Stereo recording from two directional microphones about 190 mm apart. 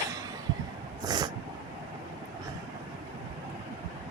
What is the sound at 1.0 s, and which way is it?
Dog, 20° right (ahead or behind).